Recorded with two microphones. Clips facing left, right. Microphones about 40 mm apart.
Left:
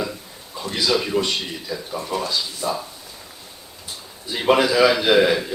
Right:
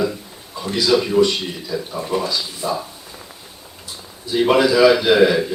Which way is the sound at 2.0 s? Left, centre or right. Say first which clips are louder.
Right 2 dB; centre.